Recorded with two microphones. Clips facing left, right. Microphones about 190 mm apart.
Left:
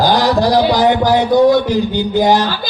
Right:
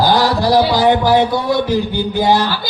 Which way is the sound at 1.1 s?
15° left (ahead or behind).